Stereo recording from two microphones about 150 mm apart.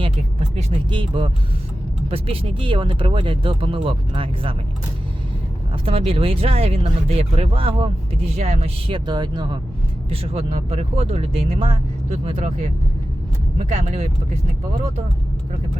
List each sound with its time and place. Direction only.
0.0 s speech: 35° right (ahead or behind)
5.8 s speech: 40° right (ahead or behind)
9.0 s speech: 30° right (ahead or behind)
10.1 s speech: 45° right (ahead or behind)